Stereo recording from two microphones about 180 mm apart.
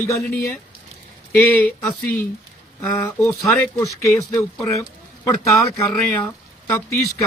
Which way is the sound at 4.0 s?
15° left (ahead or behind).